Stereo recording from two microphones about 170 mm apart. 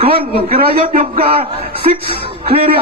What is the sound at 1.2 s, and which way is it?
Speech, 35° right (ahead or behind).